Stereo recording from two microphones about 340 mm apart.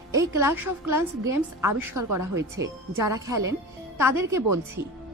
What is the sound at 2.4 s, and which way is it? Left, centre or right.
A woman's voice, centre.